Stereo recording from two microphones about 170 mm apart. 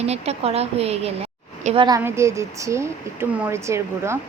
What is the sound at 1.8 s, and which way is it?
A woman's voice, 20° right (ahead or behind).